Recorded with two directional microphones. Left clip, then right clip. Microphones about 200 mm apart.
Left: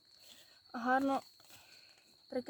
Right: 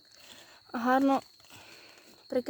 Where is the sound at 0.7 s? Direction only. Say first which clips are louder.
Right 7 dB; 50° right (ahead or behind).